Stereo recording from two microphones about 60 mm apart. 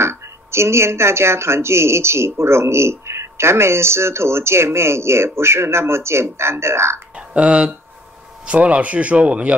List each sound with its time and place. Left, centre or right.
0.0 s speech: right
7.2 s speech: centre